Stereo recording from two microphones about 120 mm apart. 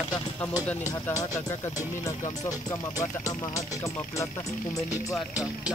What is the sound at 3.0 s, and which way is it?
Speech, 25° left (ahead or behind).